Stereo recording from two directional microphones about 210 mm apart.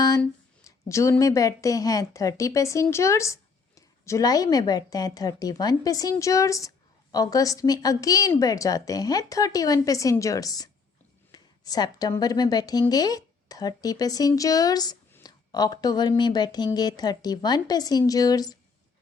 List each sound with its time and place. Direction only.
0.2 s a woman's voice: 15° left (ahead or behind)